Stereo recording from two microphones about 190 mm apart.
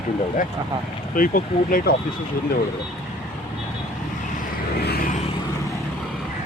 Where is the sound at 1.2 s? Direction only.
50° left (ahead or behind).